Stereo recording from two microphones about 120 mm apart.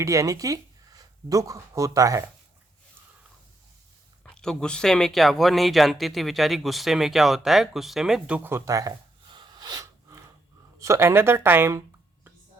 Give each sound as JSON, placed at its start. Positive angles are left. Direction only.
{"t": 0.0, "sound": "speech", "side_deg": -25}
{"t": 4.2, "sound": "speech", "side_deg": 5}
{"t": 8.4, "sound": "speech", "side_deg": -25}
{"t": 9.3, "sound": "snort", "side_deg": -40}
{"t": 10.8, "sound": "speech", "side_deg": -25}